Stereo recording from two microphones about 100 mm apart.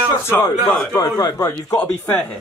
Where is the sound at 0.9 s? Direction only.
30° left (ahead or behind).